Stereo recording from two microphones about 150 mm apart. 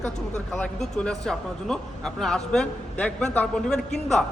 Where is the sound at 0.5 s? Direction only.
5° left (ahead or behind).